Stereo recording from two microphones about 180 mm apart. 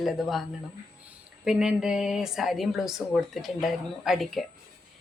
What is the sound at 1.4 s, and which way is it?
Speech, 5° right (ahead or behind).